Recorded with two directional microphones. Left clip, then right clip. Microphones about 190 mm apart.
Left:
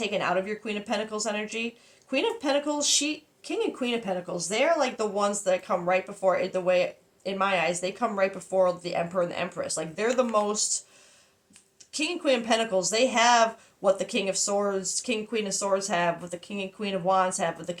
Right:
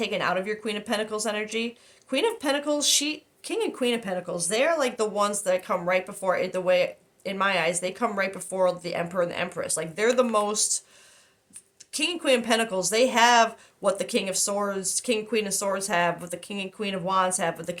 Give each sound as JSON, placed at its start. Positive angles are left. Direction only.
{"t": 0.0, "sound": "speech", "side_deg": -45}
{"t": 11.9, "sound": "speech", "side_deg": -45}